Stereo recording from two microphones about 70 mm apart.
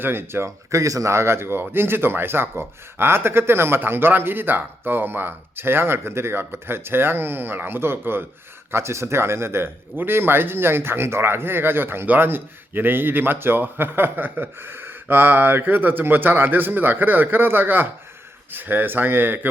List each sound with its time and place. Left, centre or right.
0.0 s a man's voice: right